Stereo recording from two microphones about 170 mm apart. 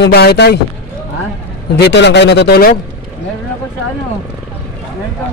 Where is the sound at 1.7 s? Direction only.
80° left; by 2.7 s 65° left (ahead or behind).